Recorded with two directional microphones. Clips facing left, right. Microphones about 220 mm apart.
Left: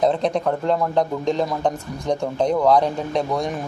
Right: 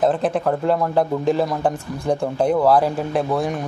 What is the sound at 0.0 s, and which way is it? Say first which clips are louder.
Speech: right 1 dB; 5° right (ahead or behind).